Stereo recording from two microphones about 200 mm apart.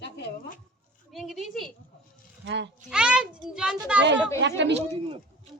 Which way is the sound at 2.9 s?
5° right (ahead or behind).